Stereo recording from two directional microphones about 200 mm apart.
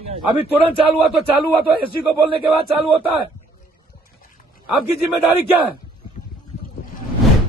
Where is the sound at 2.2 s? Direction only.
25° right (ahead or behind).